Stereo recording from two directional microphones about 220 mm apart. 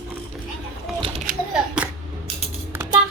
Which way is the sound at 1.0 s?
30° right (ahead or behind).